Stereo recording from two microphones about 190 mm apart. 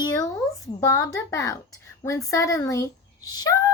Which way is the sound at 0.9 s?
15° left (ahead or behind).